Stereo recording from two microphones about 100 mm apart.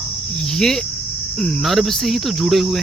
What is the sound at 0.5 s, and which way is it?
Cricket, 5° left (ahead or behind).